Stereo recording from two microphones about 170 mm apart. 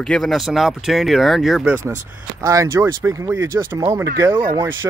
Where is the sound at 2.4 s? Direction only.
15° right (ahead or behind).